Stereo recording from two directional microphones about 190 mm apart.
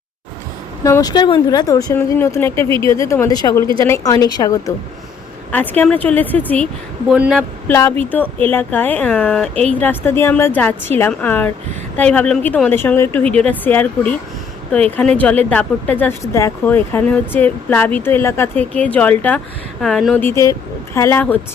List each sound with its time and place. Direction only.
0.9 s a woman's voice: 20° left (ahead or behind); by 7.4 s centre (ahead or behind)
7.7 s a woman's voice: 15° left (ahead or behind)
20.1 s a woman's voice: 15° left (ahead or behind)